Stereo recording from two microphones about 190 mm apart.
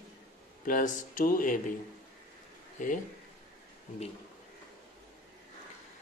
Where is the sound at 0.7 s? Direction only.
45° left (ahead or behind).